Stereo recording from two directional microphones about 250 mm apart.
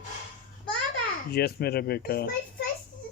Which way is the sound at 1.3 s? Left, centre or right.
Left.